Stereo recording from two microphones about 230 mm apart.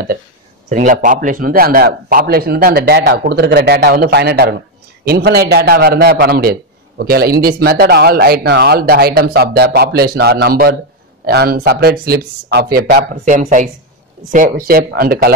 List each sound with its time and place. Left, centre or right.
0.7 s a man's voice: right